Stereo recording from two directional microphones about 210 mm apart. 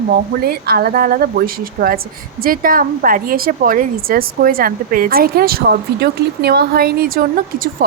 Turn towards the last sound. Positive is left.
turn(degrees=-45)  # may be behind; listen again after turning